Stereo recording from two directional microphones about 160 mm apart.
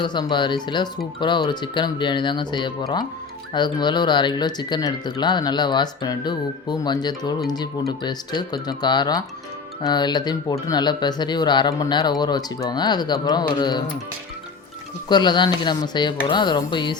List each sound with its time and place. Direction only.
0.0 s speech: 25° left (ahead or behind)
15.1 s speech: 30° left (ahead or behind)